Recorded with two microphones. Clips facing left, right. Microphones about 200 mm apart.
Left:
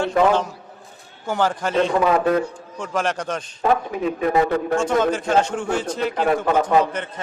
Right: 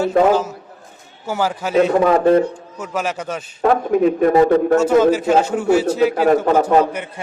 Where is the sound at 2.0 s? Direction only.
35° right (ahead or behind).